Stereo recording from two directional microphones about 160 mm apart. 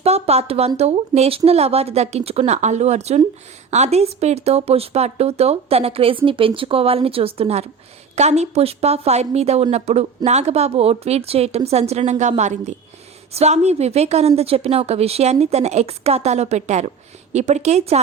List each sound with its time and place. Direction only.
0.0 s speech: 40° right (ahead or behind)